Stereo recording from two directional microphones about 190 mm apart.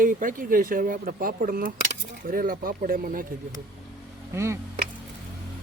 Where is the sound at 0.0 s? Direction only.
45° right (ahead or behind).